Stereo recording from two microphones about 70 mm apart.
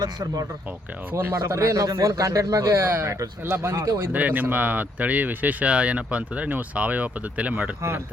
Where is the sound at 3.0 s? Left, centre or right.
Right.